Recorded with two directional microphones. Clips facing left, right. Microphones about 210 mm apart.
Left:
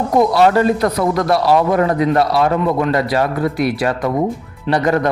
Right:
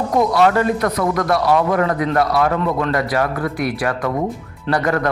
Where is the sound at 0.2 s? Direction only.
30° left (ahead or behind).